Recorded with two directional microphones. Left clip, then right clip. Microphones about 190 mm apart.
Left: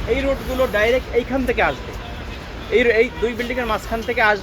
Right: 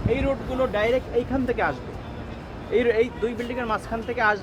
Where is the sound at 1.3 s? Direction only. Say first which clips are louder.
Left 7 dB; 40° left (ahead or behind).